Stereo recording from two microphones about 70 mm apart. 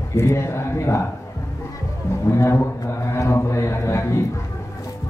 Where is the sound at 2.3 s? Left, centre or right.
Left.